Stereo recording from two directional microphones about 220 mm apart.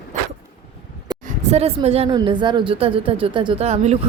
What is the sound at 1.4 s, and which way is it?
A woman's voice, 30° right (ahead or behind).